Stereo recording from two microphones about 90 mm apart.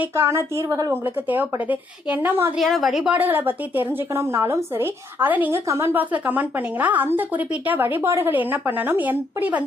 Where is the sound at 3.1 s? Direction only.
20° right (ahead or behind).